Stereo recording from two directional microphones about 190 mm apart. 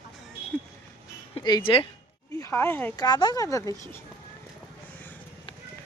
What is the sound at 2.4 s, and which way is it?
Speech, 10° left (ahead or behind).